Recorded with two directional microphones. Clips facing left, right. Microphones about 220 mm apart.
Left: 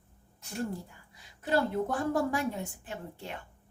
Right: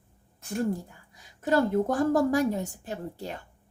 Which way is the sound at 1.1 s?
45° right (ahead or behind).